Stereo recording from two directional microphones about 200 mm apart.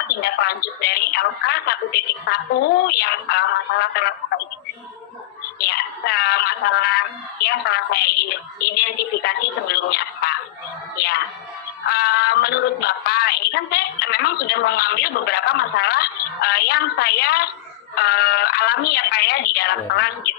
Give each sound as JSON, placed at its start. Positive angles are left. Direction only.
{"t": 0.2, "sound": "a woman's voice", "side_deg": 50}
{"t": 5.6, "sound": "speech", "side_deg": 55}
{"t": 11.9, "sound": "a sound", "side_deg": 50}
{"t": 17.9, "sound": "speech", "side_deg": 55}